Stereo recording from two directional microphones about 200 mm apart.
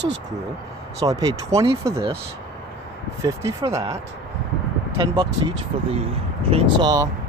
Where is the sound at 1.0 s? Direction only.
15° right (ahead or behind).